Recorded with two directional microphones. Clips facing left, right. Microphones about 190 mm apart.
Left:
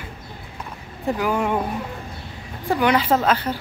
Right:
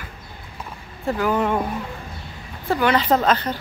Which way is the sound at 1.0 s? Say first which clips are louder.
Right 1 dB; 10° left (ahead or behind).